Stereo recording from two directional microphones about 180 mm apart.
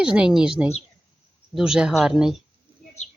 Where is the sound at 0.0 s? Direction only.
5° right (ahead or behind).